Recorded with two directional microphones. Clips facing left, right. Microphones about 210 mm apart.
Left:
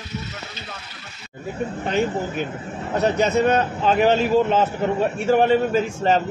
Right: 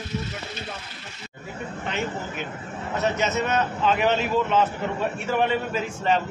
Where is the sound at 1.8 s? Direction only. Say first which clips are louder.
Left 7 dB; 40° left (ahead or behind).